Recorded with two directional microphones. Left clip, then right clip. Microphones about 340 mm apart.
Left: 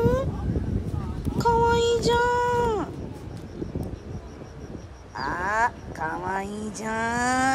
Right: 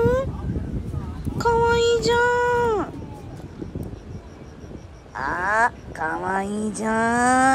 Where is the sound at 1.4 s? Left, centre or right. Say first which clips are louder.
Right 2 dB; centre.